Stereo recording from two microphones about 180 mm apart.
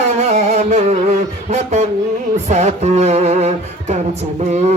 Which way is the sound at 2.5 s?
40° right (ahead or behind).